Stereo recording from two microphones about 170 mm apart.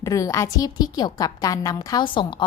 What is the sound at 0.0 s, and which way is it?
A woman's voice, 20° left (ahead or behind).